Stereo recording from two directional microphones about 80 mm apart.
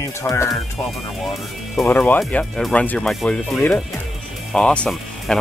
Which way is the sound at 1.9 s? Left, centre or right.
Left.